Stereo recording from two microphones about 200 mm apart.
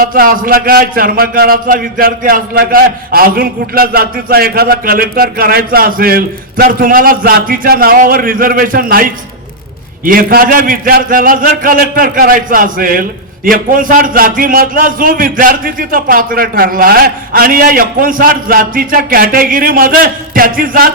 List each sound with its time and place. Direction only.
0.0 s a man's voice: 45° right (ahead or behind)